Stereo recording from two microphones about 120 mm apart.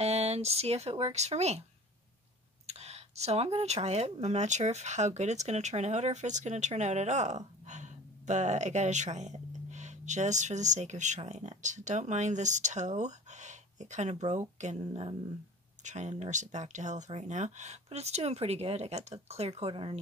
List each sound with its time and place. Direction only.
0.0 s a sound: 60° right (ahead or behind)
0.9 s speech: 60° right (ahead or behind)
2.6 s speech: 65° right (ahead or behind); by 20.0 s 45° right (ahead or behind)